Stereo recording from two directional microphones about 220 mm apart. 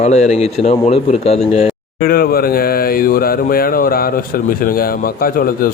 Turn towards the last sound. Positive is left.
turn(degrees=40)  # may be behind; listen again after turning